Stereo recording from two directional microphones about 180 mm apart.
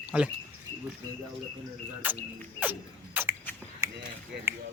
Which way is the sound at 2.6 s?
10° right (ahead or behind).